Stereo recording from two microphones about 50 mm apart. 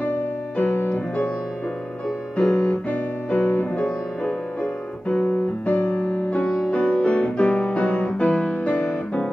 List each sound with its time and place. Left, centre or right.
0.0 s music: left
2.3 s piano: left
5.3 s music: left